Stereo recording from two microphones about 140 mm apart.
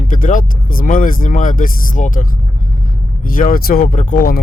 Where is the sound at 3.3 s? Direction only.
90° left.